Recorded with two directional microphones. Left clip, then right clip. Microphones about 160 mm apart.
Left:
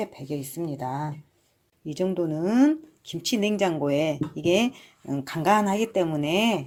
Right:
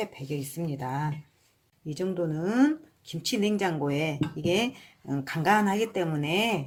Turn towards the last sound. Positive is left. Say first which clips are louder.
# left 3 dB
turn(degrees=35)  # may be behind; listen again after turning